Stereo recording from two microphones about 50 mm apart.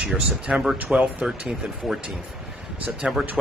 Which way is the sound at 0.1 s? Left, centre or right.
Right.